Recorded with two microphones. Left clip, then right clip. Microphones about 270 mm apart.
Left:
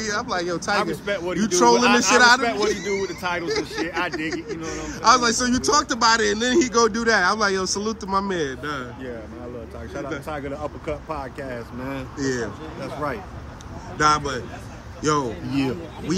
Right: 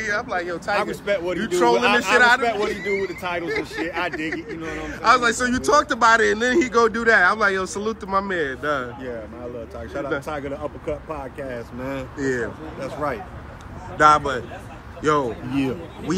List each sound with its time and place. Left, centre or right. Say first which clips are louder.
0.0 s a man's voice: right 1 dB; centre
1.0 s speech: right 3 dB; centre
1.4 s speech: left 3 dB; left
2.4 s speech: even; centre
3.4 s speech: even; left
3.8 s speech: right 2 dB; centre
4.6 s a man's voice: even; centre